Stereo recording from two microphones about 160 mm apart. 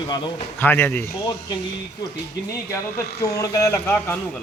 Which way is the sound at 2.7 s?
15° left (ahead or behind).